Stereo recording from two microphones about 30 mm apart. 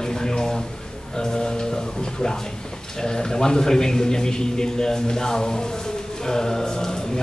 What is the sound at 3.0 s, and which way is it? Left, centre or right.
A man's voice, left.